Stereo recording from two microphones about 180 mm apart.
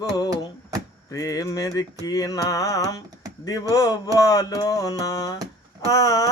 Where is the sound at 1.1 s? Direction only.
20° left (ahead or behind).